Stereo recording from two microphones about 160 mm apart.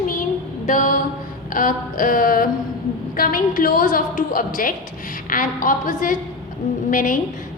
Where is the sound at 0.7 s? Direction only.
55° left (ahead or behind).